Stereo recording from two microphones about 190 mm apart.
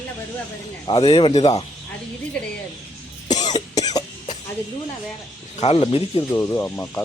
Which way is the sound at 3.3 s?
40° left (ahead or behind).